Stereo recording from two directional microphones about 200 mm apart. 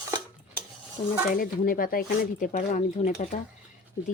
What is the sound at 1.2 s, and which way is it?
Speech, 45° left (ahead or behind).